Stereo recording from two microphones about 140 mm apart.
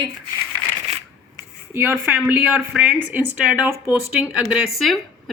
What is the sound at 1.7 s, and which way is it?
A woman's voice, 15° right (ahead or behind).